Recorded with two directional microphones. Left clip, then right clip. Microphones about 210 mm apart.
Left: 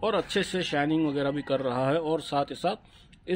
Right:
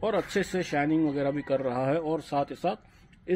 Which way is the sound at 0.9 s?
15° left (ahead or behind).